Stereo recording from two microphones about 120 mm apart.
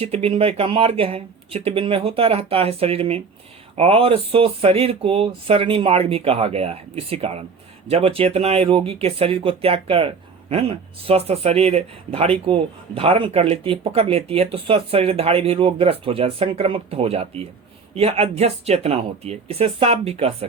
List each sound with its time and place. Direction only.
0.0 s speech: 55° right (ahead or behind)